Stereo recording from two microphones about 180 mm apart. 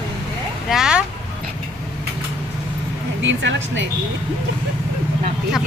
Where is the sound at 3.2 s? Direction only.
90° right.